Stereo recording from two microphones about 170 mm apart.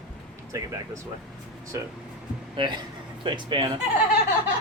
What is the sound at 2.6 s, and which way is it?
Speech, 25° right (ahead or behind).